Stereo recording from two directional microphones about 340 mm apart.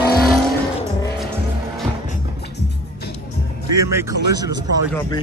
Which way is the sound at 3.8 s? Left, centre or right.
Centre.